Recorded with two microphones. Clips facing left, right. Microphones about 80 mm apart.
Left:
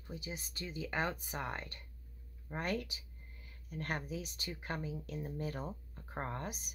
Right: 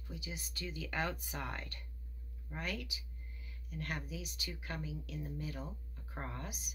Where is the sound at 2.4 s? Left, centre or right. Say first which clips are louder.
Left 5 dB; left.